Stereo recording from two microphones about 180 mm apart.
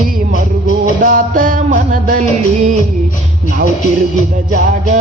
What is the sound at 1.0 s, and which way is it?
Music, 50° right (ahead or behind).